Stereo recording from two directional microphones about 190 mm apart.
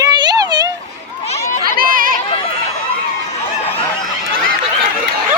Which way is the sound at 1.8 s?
45° right (ahead or behind).